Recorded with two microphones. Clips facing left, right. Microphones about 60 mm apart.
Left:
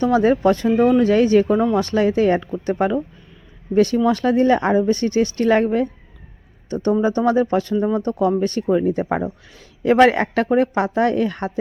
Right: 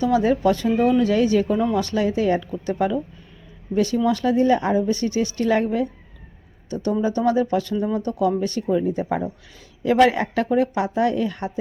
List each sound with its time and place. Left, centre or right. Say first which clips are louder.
0.0 s speech: left 3 dB; left